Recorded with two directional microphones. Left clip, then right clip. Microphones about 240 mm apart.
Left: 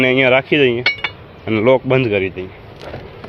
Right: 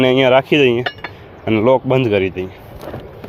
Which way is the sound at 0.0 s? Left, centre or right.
Centre.